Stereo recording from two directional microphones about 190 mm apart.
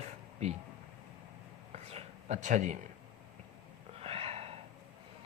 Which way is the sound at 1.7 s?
35° right (ahead or behind).